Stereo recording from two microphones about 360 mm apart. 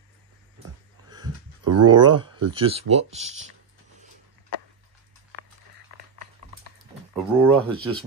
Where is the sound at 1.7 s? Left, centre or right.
Right.